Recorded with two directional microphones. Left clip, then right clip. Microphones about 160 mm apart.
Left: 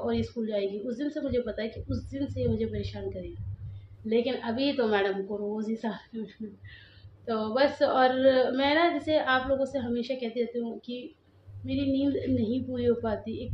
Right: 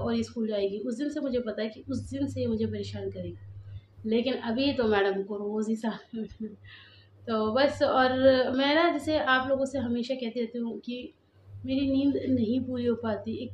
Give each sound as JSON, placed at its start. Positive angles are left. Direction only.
{"t": 0.0, "sound": "a woman's voice", "side_deg": -10}
{"t": 4.1, "sound": "a woman's voice", "side_deg": -10}
{"t": 7.2, "sound": "a woman's voice", "side_deg": -10}